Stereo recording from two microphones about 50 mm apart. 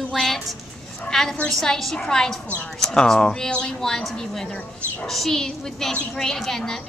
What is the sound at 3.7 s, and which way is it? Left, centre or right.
A woman's voice, centre.